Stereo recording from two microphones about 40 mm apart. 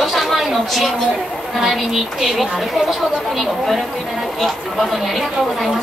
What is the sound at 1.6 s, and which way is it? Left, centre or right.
Speech, centre.